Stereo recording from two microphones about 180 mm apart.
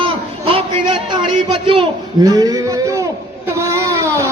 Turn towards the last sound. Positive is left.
turn(degrees=-15)  # may be behind; listen again after turning